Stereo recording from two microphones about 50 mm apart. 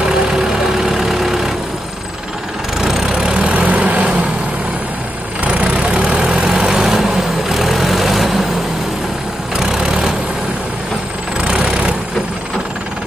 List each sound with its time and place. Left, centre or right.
0.0 s vehicle: centre
2.8 s vehicle: centre
3.4 s vehicle: right
5.4 s vehicle: right
6.7 s vehicle: centre
9.6 s vehicle: centre
11.4 s vehicle: centre